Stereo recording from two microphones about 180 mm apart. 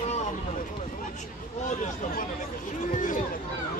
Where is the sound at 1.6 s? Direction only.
45° left (ahead or behind).